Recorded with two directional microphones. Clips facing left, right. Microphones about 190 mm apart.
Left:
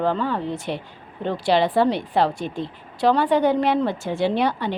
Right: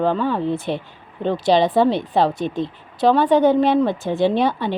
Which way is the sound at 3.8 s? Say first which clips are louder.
Right 4 dB; 20° right (ahead or behind).